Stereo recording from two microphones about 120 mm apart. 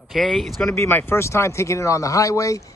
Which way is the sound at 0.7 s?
20° left (ahead or behind).